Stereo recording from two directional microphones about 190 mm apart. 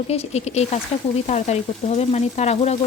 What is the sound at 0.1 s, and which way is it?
Speech, 35° left (ahead or behind).